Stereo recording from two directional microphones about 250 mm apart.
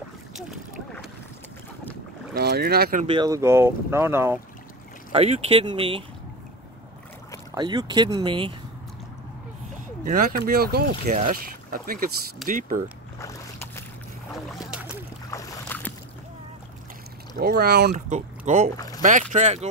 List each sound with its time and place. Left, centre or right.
2.3 s speech: right
3.1 s speech: centre
5.1 s speech: right
7.5 s speech: centre
10.0 s speech: right
13.2 s boat: centre
14.3 s boat: centre
15.3 s boat: centre
17.4 s speech: right
18.8 s speech: centre
19.0 s speech: right